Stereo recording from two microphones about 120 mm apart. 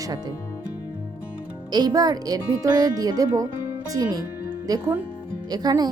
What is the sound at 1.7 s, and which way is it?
Speech, 35° right (ahead or behind).